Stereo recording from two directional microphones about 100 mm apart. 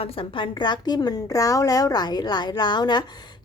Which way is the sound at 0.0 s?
70° left (ahead or behind).